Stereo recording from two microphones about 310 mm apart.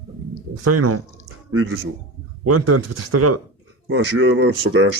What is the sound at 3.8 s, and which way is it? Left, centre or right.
A man's voice, right.